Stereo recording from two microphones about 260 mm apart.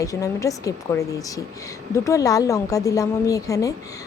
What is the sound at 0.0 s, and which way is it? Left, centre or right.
A woman's voice, centre.